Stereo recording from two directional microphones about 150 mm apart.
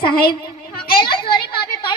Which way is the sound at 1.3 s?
35° left (ahead or behind).